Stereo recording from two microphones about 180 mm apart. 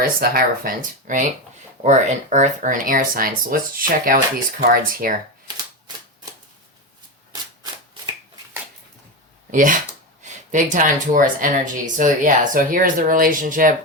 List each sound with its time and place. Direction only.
0.2 s speech: 55° right (ahead or behind)
9.5 s speech: 45° right (ahead or behind)